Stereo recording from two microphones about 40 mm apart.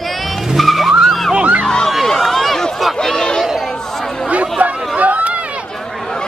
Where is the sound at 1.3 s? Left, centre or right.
Right.